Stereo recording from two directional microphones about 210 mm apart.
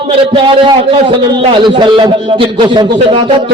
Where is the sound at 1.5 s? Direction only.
25° right (ahead or behind).